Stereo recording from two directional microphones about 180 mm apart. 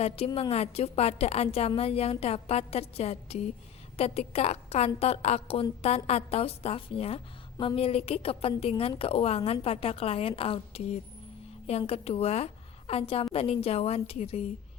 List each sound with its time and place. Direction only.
0.3 s a woman's voice: 30° left (ahead or behind)